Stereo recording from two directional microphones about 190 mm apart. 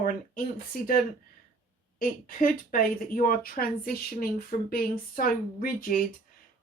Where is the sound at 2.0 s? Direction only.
45° left (ahead or behind).